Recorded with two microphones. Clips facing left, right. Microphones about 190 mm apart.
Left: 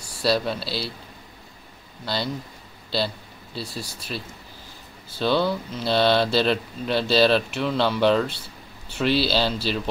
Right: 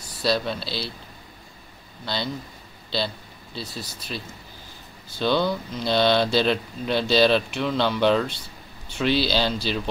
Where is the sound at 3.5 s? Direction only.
5° left (ahead or behind).